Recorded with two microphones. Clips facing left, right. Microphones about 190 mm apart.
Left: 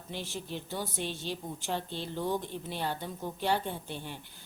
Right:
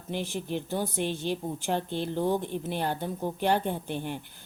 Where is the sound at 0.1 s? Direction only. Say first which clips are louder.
Right 7 dB; 50° right (ahead or behind).